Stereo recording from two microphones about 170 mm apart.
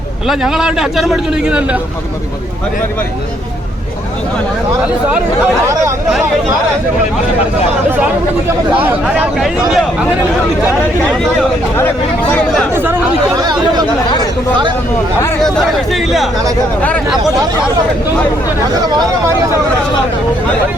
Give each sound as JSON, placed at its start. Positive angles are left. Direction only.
{"t": 0.3, "sound": "speech", "side_deg": -5}
{"t": 8.7, "sound": "speech", "side_deg": -10}
{"t": 11.1, "sound": "speech", "side_deg": 0}
{"t": 12.7, "sound": "speech", "side_deg": -15}
{"t": 13.4, "sound": "speech", "side_deg": -25}
{"t": 15.4, "sound": "speech", "side_deg": 5}